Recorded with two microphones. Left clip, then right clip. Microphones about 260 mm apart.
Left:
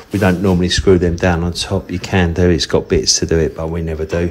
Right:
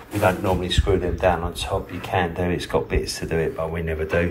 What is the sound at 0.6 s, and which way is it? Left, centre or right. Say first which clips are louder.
Speech: left 8 dB; left.